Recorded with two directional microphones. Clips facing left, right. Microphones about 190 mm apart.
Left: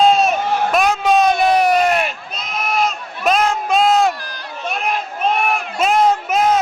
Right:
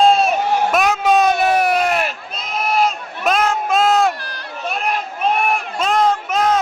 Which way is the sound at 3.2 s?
Centre (ahead or behind).